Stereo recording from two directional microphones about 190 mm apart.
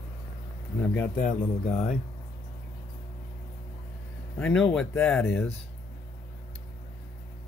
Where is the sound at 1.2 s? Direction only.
35° left (ahead or behind).